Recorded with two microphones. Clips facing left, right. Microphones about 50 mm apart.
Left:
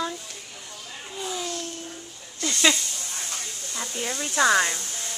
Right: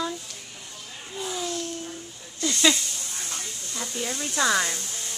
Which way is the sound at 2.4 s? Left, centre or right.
Centre.